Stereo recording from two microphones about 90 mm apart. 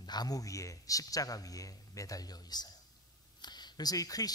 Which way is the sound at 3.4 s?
50° left (ahead or behind).